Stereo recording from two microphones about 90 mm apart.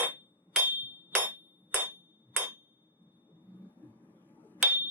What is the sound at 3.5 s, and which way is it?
Tuning fork, 20° left (ahead or behind).